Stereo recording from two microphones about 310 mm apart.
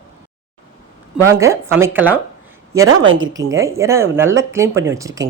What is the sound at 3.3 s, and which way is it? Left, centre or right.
Speech, centre.